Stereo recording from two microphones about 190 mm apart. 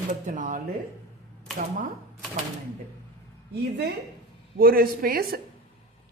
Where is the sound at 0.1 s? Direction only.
45° right (ahead or behind).